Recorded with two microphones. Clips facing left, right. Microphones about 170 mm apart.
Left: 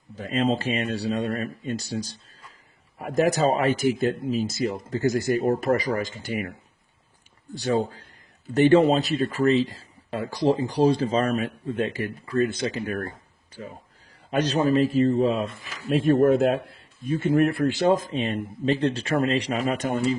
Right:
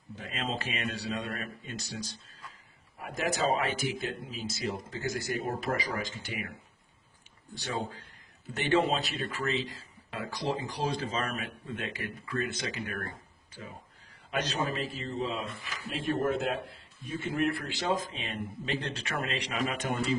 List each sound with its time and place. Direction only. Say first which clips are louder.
0.2 s speech: left 12 dB; 35° left (ahead or behind)
7.5 s speech: left 11 dB; 40° left (ahead or behind)
14.3 s speech: left 10 dB; 40° left (ahead or behind)